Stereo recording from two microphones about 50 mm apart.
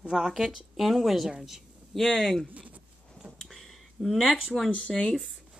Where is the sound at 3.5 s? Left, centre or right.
Centre.